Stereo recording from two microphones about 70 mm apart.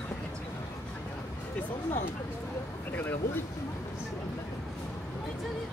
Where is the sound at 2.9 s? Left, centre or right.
Left.